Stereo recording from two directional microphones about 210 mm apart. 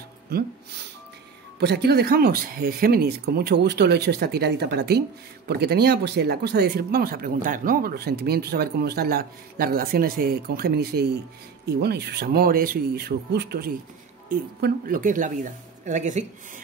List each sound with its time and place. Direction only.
0.3 s speech: 45° right (ahead or behind)
1.6 s speech: 50° right (ahead or behind); by 16.3 s 35° right (ahead or behind)